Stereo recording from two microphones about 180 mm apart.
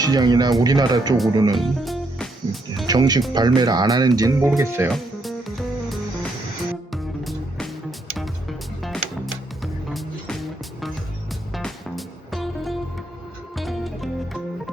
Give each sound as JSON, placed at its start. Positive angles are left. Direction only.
{"t": 0.0, "sound": "speech", "side_deg": -20}
{"t": 1.5, "sound": "music", "side_deg": 0}
{"t": 2.8, "sound": "speech", "side_deg": -20}
{"t": 4.9, "sound": "music", "side_deg": 0}